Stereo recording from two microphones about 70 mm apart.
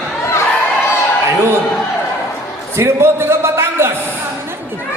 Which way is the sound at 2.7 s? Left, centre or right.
Right.